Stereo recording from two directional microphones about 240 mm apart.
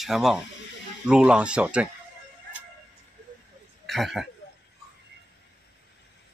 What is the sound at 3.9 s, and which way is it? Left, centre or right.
Speech, centre.